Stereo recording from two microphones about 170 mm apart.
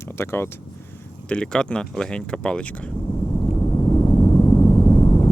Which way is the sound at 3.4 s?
20° left (ahead or behind).